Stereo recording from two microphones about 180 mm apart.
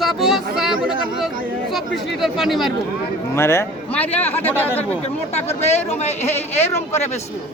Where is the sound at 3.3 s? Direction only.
15° left (ahead or behind).